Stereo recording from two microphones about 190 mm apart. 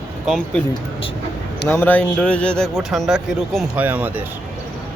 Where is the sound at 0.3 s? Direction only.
5° left (ahead or behind).